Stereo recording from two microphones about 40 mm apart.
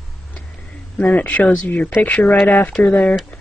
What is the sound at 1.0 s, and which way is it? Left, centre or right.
Speech, left.